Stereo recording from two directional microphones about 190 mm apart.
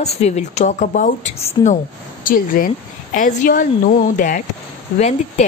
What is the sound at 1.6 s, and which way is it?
Speech, 20° left (ahead or behind).